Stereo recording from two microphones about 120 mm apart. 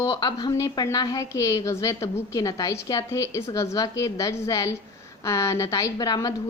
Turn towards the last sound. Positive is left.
turn(degrees=30)  # may be behind; listen again after turning